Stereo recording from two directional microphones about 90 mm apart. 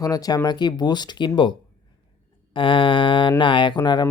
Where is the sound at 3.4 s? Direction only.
65° left (ahead or behind).